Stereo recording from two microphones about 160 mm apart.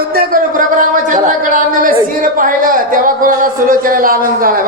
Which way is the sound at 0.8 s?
55° right (ahead or behind).